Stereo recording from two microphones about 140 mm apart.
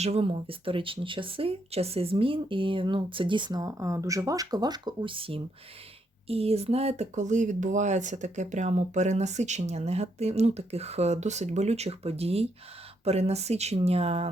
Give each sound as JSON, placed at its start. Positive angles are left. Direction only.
{"t": 0.0, "sound": "speech", "side_deg": -45}